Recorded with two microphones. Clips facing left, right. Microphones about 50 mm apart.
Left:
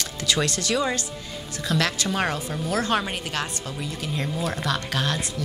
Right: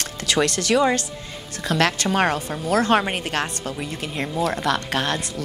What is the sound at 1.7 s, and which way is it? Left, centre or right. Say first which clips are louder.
Speech: right 4 dB; right.